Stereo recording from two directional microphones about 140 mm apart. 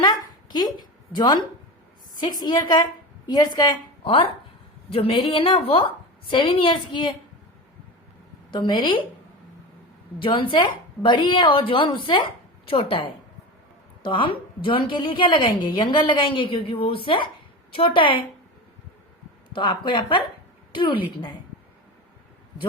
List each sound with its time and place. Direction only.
0.0 s a sound: 30° left (ahead or behind)
2.4 s a woman's voice: 30° left (ahead or behind)
4.0 s a woman's voice: 40° left (ahead or behind)
8.4 s a woman's voice: 35° left (ahead or behind)
10.2 s a woman's voice: 35° left (ahead or behind)
19.5 s a woman's voice: 35° left (ahead or behind)